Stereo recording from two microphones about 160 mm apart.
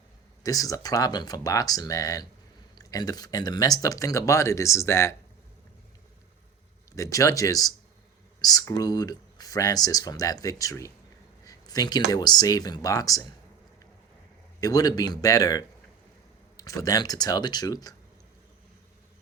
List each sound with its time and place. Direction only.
0.4 s speech: 20° left (ahead or behind)
6.9 s speech: 20° left (ahead or behind)
14.6 s speech: 25° left (ahead or behind)